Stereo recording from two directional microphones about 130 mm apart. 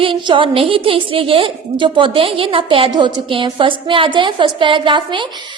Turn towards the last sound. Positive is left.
turn(degrees=-40)  # may be behind; listen again after turning